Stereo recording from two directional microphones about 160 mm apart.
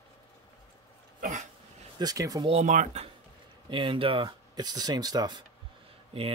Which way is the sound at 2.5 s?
45° right (ahead or behind).